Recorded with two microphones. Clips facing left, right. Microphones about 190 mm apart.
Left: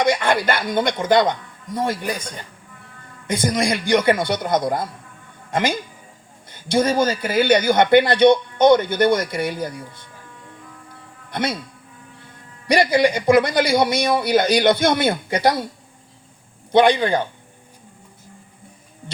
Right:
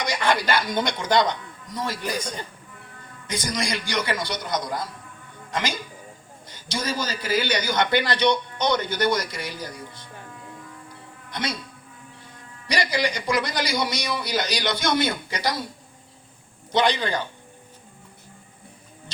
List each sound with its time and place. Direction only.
0.0 s a man's voice: 55° left (ahead or behind)
3.2 s a man's voice: 55° left (ahead or behind)
11.3 s a man's voice: 55° left (ahead or behind)
12.7 s a man's voice: 55° left (ahead or behind)
16.7 s a man's voice: 55° left (ahead or behind)